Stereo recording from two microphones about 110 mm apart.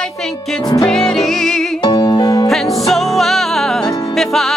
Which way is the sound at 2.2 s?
30° left (ahead or behind).